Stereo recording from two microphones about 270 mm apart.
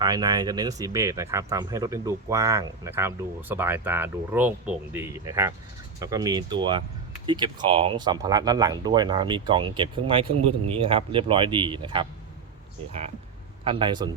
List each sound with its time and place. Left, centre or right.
0.0 s speech: centre
13.7 s speech: centre